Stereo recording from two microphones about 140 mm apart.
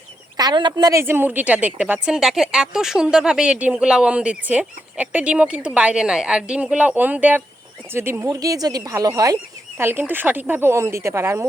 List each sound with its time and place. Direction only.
0.3 s a woman's voice: 30° right (ahead or behind)